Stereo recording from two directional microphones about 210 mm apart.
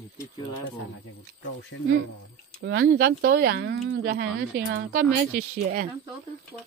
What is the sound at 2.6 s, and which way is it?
Speech, 55° right (ahead or behind).